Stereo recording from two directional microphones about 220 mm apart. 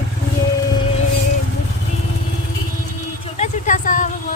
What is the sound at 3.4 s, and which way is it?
Vehicle, 35° left (ahead or behind).